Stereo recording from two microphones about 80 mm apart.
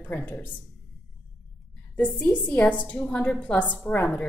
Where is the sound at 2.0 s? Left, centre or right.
Centre.